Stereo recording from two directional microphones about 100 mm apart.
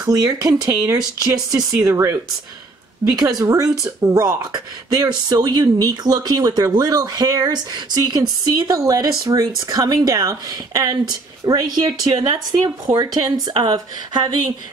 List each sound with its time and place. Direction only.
0.0 s speech: 35° right (ahead or behind)
3.2 s speech: 40° right (ahead or behind)
4.4 s speech: 50° right (ahead or behind)